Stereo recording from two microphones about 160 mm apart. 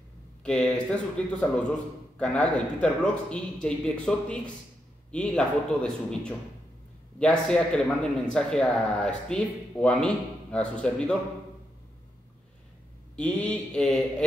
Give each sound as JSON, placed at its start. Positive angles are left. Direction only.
{"t": 0.4, "sound": "a man's voice", "side_deg": 5}
{"t": 13.1, "sound": "mantra", "side_deg": 5}